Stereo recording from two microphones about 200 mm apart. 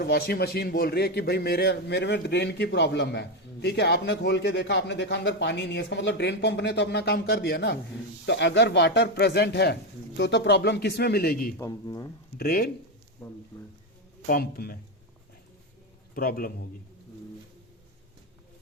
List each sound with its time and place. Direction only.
0.0 s a man's voice: 55° left (ahead or behind)
11.5 s a man's voice: 15° left (ahead or behind)
12.4 s speech: 50° left (ahead or behind)
13.2 s a man's voice: 10° left (ahead or behind)
14.3 s speech: 50° left (ahead or behind)
16.1 s speech: 45° left (ahead or behind)